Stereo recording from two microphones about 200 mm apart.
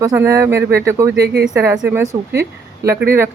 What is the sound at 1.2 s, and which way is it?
Speech, 55° right (ahead or behind).